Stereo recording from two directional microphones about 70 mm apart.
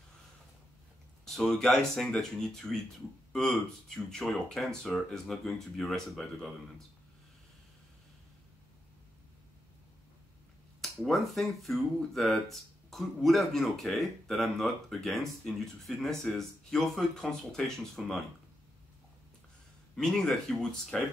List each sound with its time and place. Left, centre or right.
1.2 s speech: centre
10.8 s speech: centre
20.0 s speech: centre